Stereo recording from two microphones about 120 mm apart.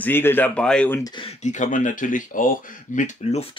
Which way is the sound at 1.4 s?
90° left.